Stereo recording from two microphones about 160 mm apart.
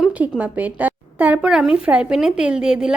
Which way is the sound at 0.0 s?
10° right (ahead or behind).